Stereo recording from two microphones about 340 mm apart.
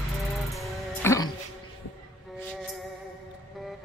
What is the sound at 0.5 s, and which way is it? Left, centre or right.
Music, centre.